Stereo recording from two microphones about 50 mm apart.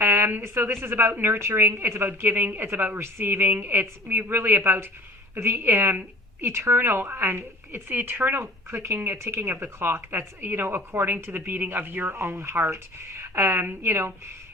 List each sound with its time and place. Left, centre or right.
0.0 s a sound: right
0.4 s a woman's voice: right
5.6 s a woman's voice: right
9.4 s a woman's voice: right
12.3 s a woman's voice: right